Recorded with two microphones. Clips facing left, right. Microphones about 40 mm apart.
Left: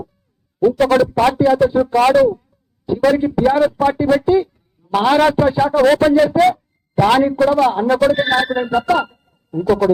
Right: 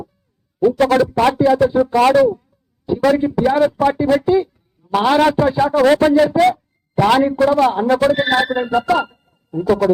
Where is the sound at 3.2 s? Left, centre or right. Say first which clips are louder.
Left 1 dB; centre.